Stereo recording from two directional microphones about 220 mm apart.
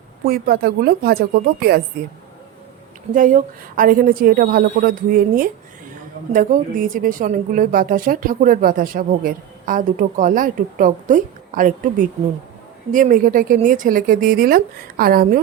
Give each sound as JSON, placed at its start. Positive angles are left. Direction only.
{"t": 0.3, "sound": "speech", "side_deg": -40}
{"t": 3.1, "sound": "a woman's voice", "side_deg": -35}